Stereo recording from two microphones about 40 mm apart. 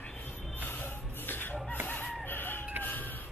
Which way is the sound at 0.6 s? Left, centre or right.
Left.